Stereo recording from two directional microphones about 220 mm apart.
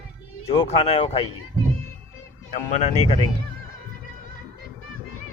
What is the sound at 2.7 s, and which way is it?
Speech, 30° left (ahead or behind).